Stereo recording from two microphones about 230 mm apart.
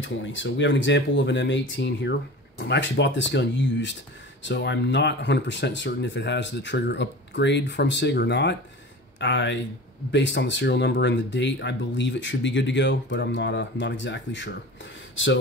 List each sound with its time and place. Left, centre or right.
0.0 s speech: left